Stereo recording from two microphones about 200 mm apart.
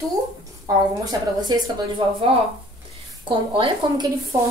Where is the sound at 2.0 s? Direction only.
25° right (ahead or behind).